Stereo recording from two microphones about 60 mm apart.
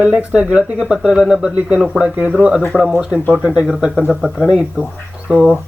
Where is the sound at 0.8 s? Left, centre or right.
Centre.